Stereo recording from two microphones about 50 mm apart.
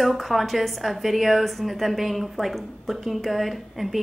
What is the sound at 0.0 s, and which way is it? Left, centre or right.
A woman's voice, centre.